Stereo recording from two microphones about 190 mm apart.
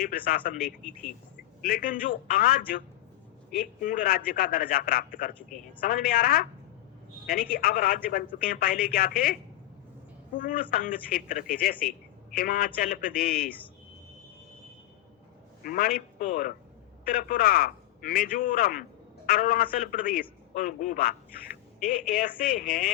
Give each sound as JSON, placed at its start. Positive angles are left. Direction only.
{"t": 0.0, "sound": "a man's voice", "side_deg": 50}
{"t": 15.6, "sound": "a man's voice", "side_deg": 50}